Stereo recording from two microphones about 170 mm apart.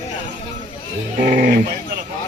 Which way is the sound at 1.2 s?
50° right (ahead or behind).